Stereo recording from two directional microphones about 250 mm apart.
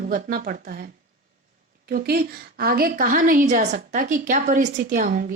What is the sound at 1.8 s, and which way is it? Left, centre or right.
Speech, right.